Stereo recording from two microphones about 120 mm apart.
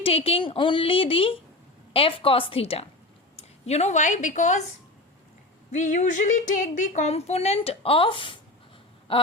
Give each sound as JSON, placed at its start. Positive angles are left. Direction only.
{"t": 0.0, "sound": "a woman's voice", "side_deg": 55}
{"t": 5.7, "sound": "a woman's voice", "side_deg": 90}